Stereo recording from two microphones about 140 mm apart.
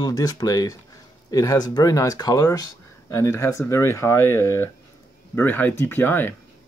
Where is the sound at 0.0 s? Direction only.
25° left (ahead or behind).